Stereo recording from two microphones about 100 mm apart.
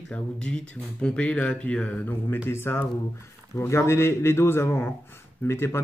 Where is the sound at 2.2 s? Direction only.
25° left (ahead or behind).